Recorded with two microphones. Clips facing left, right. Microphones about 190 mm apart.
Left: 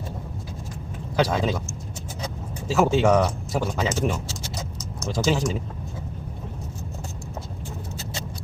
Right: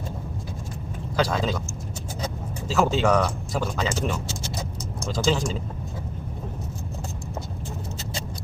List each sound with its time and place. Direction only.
1.1 s speech: 15° left (ahead or behind)
2.6 s speech: 15° left (ahead or behind)